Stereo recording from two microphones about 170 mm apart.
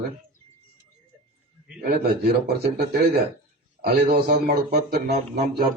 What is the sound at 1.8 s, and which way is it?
Speech, 65° right (ahead or behind).